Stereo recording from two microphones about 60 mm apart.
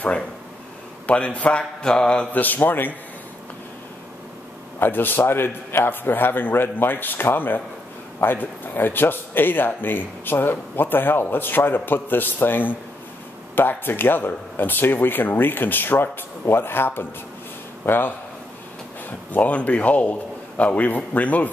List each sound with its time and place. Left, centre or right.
1.0 s a man's voice: left
1.6 s a sound: centre
2.3 s a man's voice: left
4.7 s a man's voice: left
19.3 s a man's voice: left